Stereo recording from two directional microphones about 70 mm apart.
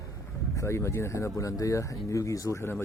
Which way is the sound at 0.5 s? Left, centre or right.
Left.